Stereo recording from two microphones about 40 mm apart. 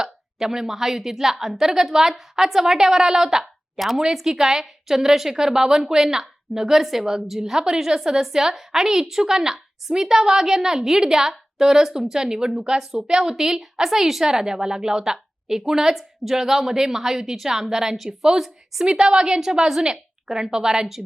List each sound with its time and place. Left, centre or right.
0.0 s a woman's voice: centre
3.4 s a sound: centre
4.0 s a woman's voice: centre
18.9 s a woman's voice: right